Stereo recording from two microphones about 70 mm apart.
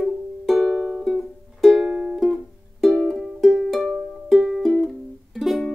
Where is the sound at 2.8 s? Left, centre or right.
Centre.